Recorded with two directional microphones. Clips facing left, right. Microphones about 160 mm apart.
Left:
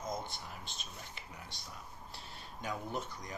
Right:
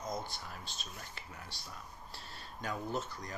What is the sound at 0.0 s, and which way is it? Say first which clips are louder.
Speech: even; 20° left (ahead or behind).